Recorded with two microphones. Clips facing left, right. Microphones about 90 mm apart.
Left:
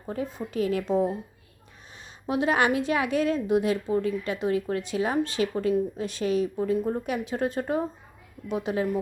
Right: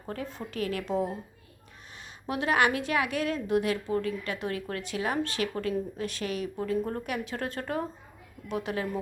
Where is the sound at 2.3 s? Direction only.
25° left (ahead or behind).